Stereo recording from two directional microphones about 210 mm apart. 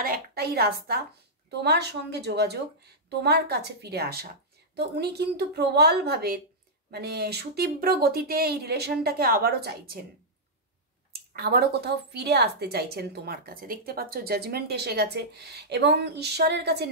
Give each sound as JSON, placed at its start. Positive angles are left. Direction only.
{"t": 0.0, "sound": "a woman's voice", "side_deg": -45}
{"t": 11.3, "sound": "a woman's voice", "side_deg": -50}